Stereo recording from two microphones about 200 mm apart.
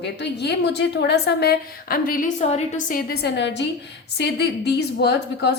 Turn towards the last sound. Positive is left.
turn(degrees=55)  # may be behind; listen again after turning